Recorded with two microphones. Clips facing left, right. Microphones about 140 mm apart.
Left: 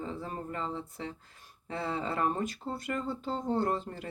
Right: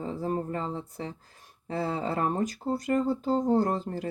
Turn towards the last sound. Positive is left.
turn(degrees=-35)  # may be behind; listen again after turning